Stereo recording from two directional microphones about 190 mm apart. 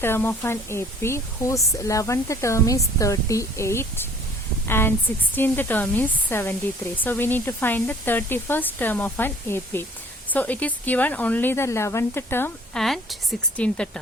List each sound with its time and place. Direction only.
0.0 s a woman's voice: 10° left (ahead or behind)
12.8 s speech: centre (ahead or behind)